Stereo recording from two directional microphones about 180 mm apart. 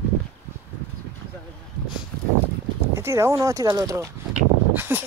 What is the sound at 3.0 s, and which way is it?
Speech, 15° right (ahead or behind).